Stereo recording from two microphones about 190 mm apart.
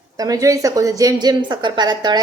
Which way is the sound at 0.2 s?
20° right (ahead or behind).